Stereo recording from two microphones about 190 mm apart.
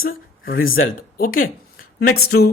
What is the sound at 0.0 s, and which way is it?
A man's voice, 50° left (ahead or behind).